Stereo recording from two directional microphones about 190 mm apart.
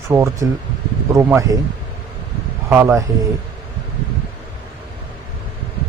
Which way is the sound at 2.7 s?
15° right (ahead or behind).